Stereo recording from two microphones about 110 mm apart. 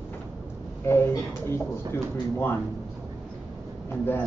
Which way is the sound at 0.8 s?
20° left (ahead or behind).